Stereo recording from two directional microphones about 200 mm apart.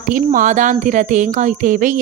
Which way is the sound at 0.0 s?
40° right (ahead or behind).